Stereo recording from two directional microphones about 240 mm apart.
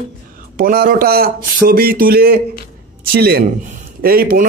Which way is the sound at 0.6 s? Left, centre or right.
Right.